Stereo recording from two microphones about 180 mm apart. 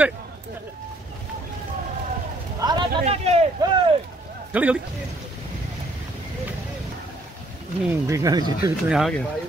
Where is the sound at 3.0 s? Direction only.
35° right (ahead or behind).